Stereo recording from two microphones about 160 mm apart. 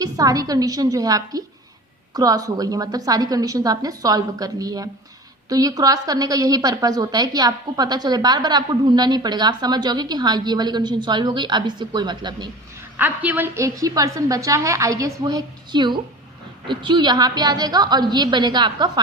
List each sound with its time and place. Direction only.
0.0 s a woman's voice: 20° right (ahead or behind)
13.0 s a woman's voice: 10° right (ahead or behind); by 18.9 s 25° right (ahead or behind)